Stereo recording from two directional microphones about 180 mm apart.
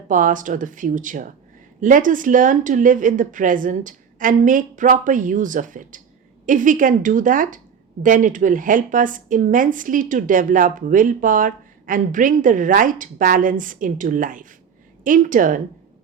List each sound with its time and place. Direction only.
0.1 s a woman's voice: 45° right (ahead or behind)